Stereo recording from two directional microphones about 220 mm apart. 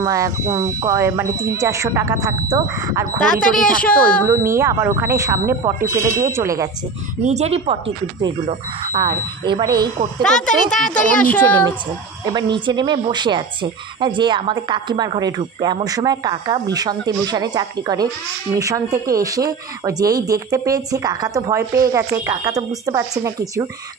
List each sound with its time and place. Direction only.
0.0 s speech: 15° right (ahead or behind)
3.5 s a child's voice: 5° left (ahead or behind)
4.3 s speech: 15° right (ahead or behind)
7.2 s speech: 30° right (ahead or behind)
10.2 s a child's voice: 5° left (ahead or behind)
12.3 s speech: 20° right (ahead or behind)